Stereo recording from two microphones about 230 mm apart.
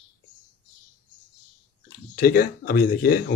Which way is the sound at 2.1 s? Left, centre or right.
Left.